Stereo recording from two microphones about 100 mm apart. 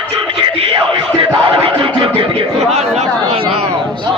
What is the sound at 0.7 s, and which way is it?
Music, 65° right (ahead or behind).